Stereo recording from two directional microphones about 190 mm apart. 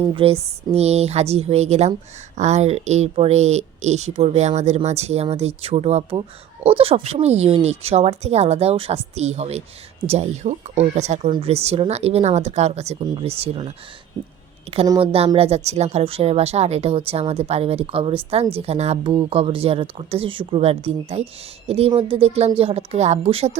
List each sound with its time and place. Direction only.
0.1 s speech: 30° right (ahead or behind)
14.8 s speech: 25° right (ahead or behind)